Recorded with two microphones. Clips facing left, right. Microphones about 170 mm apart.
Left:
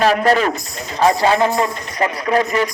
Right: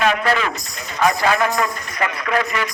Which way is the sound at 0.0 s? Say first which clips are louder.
Left 4 dB; 40° left (ahead or behind).